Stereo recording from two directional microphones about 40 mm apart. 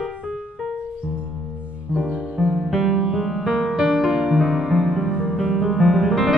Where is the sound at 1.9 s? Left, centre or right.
Right.